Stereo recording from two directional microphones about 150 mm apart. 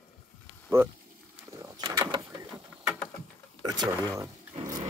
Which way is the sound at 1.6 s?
25° right (ahead or behind).